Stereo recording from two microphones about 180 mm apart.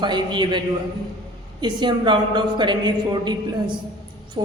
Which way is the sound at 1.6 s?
25° right (ahead or behind).